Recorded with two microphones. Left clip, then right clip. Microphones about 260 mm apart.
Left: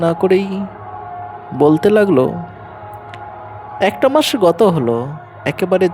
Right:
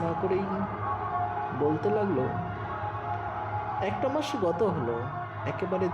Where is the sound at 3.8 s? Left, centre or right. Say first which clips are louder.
Left 18 dB; left.